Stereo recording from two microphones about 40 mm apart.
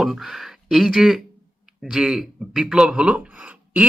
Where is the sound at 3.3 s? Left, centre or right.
Right.